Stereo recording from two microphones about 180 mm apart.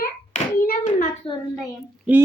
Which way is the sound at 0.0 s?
50° left (ahead or behind).